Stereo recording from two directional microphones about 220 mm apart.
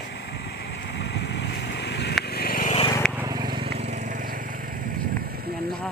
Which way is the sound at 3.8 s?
35° right (ahead or behind).